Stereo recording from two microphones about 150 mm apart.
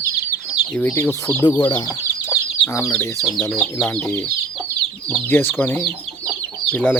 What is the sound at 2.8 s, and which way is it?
Speech, 15° left (ahead or behind).